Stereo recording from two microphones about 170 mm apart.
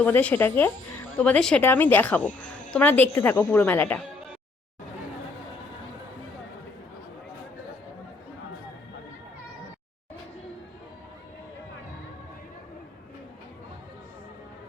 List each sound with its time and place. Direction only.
0.0 s a woman's voice: 10° left (ahead or behind)